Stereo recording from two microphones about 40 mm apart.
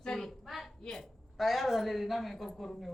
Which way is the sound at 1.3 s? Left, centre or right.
Centre.